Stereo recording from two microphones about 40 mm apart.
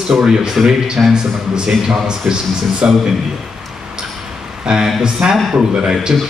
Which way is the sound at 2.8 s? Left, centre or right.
Right.